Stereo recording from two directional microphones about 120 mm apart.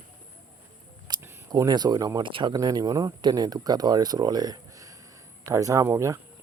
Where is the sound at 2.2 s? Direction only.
40° right (ahead or behind); by 6.1 s 25° right (ahead or behind).